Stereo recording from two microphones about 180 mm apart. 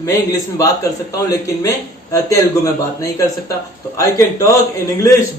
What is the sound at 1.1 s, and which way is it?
A man's voice, 20° left (ahead or behind).